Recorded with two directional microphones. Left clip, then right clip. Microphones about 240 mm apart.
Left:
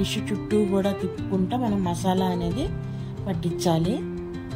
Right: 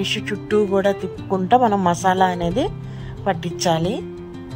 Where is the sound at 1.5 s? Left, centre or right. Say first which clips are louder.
Right 15 dB; right.